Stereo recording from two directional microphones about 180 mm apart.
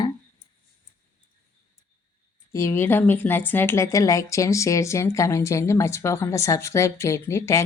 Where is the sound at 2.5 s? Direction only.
15° left (ahead or behind).